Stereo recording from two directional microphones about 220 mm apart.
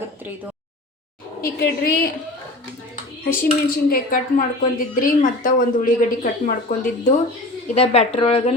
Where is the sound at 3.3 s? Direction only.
40° left (ahead or behind).